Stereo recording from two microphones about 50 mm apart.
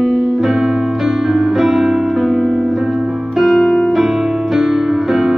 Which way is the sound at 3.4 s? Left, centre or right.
Centre.